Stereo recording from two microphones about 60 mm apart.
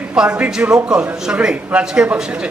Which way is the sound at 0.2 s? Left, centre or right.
Centre.